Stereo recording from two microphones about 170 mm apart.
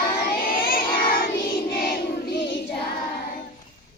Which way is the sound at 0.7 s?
55° left (ahead or behind).